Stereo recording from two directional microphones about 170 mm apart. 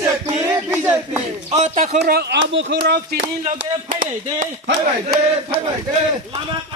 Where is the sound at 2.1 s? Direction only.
75° right (ahead or behind); by 2.7 s 90° right.